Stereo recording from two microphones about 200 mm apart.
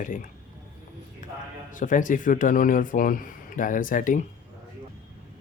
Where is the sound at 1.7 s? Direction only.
40° left (ahead or behind).